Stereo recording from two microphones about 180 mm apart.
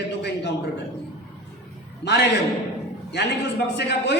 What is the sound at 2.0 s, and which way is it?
Speech, 70° left (ahead or behind).